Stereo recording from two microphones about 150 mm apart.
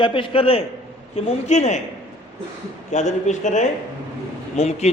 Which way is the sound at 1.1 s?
50° left (ahead or behind).